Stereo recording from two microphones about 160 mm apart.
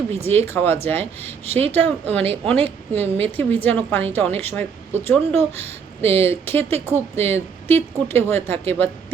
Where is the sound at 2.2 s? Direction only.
40° right (ahead or behind).